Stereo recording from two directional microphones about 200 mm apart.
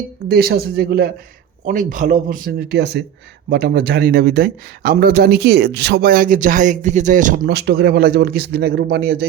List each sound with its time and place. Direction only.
0.3 s speech: 50° right (ahead or behind)
7.4 s speech: 55° right (ahead or behind)